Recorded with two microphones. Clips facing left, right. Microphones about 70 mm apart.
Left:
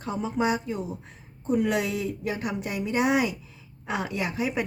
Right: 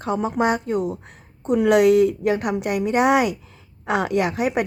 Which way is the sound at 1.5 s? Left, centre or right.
Right.